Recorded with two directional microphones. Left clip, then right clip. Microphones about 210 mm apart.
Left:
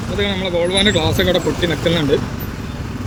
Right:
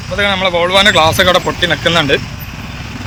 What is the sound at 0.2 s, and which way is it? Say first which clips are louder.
Speech: right 7 dB; 5° left (ahead or behind).